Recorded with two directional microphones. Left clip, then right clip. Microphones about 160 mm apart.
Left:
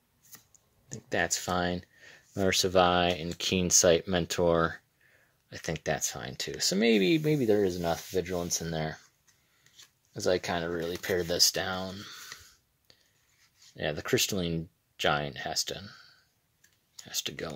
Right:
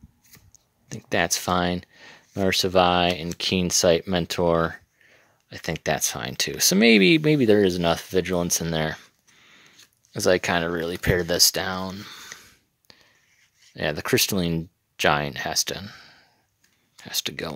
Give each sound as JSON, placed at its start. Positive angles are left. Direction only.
{"t": 0.9, "sound": "speech", "side_deg": -30}
{"t": 10.1, "sound": "speech", "side_deg": -45}
{"t": 12.4, "sound": "a sound", "side_deg": -35}
{"t": 13.7, "sound": "speech", "side_deg": -35}